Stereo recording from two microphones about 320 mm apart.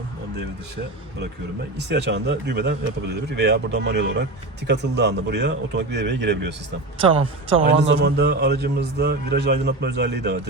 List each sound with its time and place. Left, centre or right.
1.9 s speech: right
7.0 s a man's voice: centre
7.9 s speech: right